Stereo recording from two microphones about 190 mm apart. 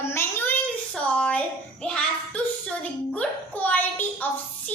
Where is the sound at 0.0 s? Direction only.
10° left (ahead or behind).